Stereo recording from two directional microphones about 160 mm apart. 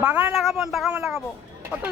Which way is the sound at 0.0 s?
10° right (ahead or behind).